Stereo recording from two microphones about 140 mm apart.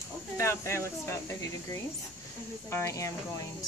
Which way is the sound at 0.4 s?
20° left (ahead or behind).